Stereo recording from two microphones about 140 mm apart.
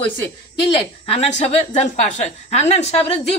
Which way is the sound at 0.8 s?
45° left (ahead or behind).